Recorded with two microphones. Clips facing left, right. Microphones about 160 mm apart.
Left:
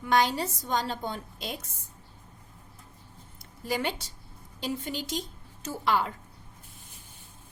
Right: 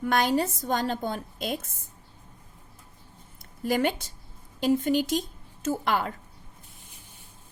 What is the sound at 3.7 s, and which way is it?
A woman's voice, 50° right (ahead or behind).